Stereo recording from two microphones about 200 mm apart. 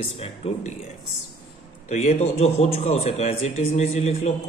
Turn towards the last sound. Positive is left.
turn(degrees=35)  # may be behind; listen again after turning